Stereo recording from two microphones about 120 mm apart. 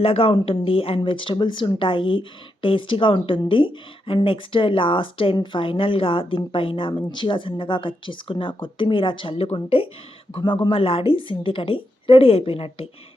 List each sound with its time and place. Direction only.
0.0 s speech: 50° left (ahead or behind)